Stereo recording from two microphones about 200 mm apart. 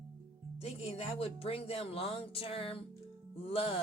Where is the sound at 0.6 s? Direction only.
30° left (ahead or behind).